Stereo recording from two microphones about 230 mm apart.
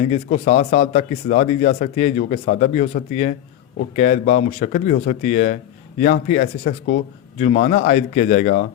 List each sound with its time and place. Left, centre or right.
0.0 s speech: left